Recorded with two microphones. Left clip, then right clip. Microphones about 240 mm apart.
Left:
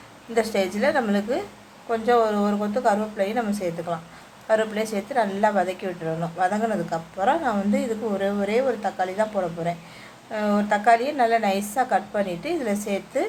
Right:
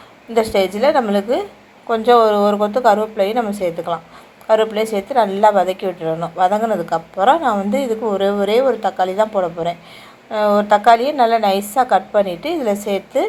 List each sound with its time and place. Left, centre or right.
0.3 s a woman's voice: centre